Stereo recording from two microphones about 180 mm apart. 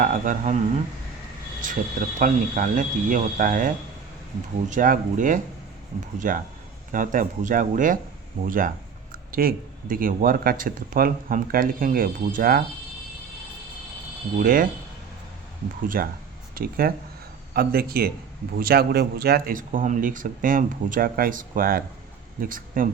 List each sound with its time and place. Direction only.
0.0 s speech: 45° right (ahead or behind)
1.6 s speech: 45° right (ahead or behind)
4.7 s speech: 45° right (ahead or behind)
14.3 s speech: 50° right (ahead or behind)
16.0 s speech: 55° right (ahead or behind)